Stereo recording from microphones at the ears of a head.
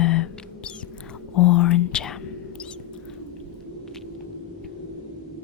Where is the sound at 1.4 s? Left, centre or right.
Left.